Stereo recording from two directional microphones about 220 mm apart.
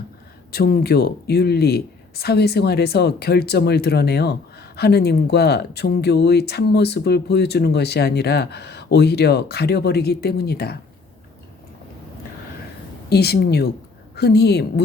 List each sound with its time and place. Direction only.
0.5 s speech: 45° left (ahead or behind)
13.1 s speech: 45° left (ahead or behind)